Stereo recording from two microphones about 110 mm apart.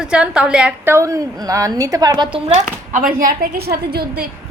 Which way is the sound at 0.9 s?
30° right (ahead or behind).